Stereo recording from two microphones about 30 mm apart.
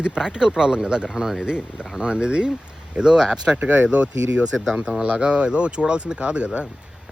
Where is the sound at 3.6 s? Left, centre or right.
Right.